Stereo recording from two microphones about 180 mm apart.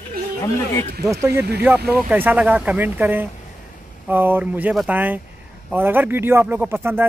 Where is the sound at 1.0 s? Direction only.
15° right (ahead or behind).